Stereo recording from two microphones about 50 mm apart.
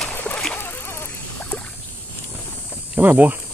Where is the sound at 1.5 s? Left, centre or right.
Left.